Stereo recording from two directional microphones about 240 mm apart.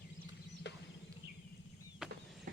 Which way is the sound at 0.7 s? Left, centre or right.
Left.